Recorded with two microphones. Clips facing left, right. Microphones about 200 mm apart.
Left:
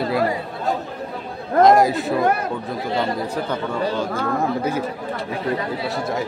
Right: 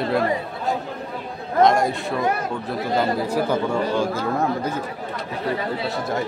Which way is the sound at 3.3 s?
10° right (ahead or behind).